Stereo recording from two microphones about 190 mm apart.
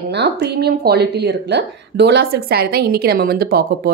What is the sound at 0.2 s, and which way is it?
Speech, 60° right (ahead or behind).